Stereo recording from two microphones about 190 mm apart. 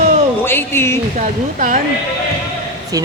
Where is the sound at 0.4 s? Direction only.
10° left (ahead or behind).